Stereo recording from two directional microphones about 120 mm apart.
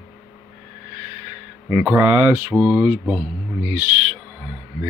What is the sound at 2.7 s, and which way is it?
Mantra, 5° right (ahead or behind).